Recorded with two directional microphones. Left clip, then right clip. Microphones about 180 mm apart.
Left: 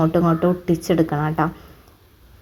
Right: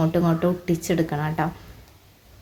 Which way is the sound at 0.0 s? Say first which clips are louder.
Left 4 dB; 5° left (ahead or behind).